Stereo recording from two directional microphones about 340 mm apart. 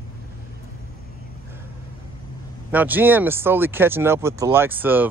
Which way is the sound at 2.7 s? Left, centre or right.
Centre.